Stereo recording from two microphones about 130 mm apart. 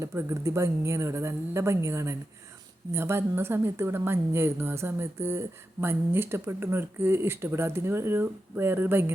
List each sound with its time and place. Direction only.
0.0 s a woman's voice: 20° right (ahead or behind)